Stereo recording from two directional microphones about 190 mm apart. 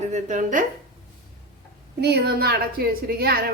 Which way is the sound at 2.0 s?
55° right (ahead or behind).